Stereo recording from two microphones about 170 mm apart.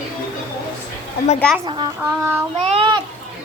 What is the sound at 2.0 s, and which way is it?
Speech, 15° right (ahead or behind).